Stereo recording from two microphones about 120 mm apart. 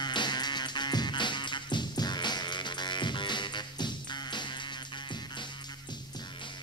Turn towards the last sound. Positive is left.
turn(degrees=40)  # may be behind; listen again after turning